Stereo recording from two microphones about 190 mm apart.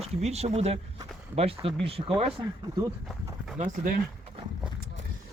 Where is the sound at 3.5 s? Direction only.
40° right (ahead or behind).